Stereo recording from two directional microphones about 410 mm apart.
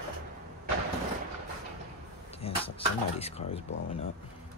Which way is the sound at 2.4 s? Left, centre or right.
Centre.